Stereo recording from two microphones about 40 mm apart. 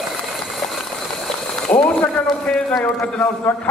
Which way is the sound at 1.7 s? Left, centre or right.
Left.